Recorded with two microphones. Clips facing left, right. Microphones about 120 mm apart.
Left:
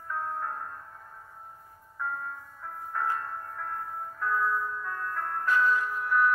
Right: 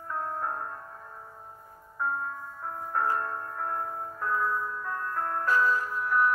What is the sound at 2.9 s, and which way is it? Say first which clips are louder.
Music: right 3 dB; 40° right (ahead or behind).